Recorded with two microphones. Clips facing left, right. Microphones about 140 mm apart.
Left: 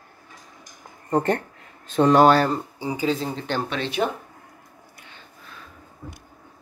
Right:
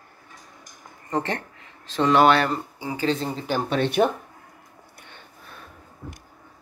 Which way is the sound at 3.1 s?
Centre (ahead or behind).